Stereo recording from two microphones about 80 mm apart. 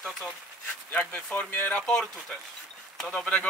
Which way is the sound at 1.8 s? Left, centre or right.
Centre.